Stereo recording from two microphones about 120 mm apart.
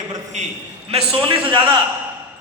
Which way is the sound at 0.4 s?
80° right.